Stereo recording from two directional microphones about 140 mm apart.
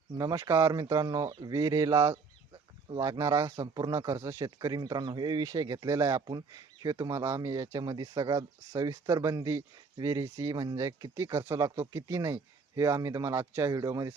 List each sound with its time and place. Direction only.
0.2 s speech: 25° right (ahead or behind)